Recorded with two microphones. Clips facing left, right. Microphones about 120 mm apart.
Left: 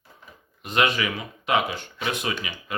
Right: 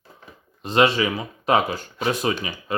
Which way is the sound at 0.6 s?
30° right (ahead or behind).